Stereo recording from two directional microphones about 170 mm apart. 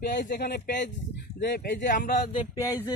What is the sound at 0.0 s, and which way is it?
Speech, 85° left.